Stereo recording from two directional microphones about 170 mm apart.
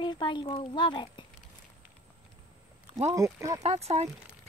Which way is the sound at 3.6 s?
40° right (ahead or behind).